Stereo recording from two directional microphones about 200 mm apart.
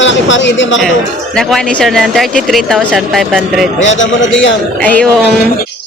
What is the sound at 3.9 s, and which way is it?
Speech, 70° left (ahead or behind).